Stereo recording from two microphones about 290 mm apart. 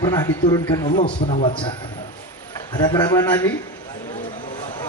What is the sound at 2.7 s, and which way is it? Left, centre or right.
Music, centre.